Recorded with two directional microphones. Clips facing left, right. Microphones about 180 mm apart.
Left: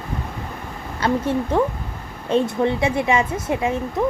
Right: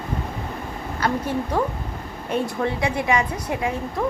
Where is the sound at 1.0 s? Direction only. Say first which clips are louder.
Left 4 dB; 25° left (ahead or behind).